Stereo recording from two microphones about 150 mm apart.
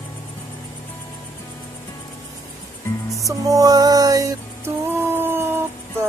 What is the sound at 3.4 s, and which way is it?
Music, 25° right (ahead or behind).